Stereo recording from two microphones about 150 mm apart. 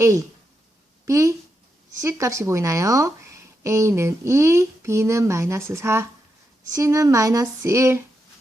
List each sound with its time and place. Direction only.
0.0 s speech: 20° right (ahead or behind)